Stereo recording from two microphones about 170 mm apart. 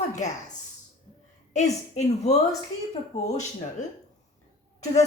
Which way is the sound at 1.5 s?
40° left (ahead or behind).